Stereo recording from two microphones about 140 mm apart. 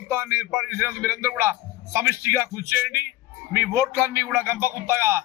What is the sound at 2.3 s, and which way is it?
A man's voice, 15° right (ahead or behind).